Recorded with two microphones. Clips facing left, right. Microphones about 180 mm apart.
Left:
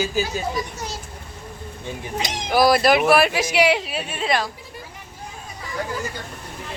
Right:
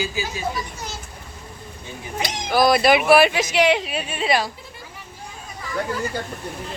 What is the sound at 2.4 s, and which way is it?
Speech, 10° left (ahead or behind).